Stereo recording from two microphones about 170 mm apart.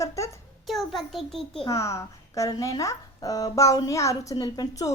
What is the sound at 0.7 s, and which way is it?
Speech, centre (ahead or behind).